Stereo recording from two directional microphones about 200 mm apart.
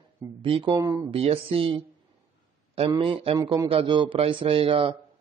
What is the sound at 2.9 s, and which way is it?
Speech, 25° right (ahead or behind).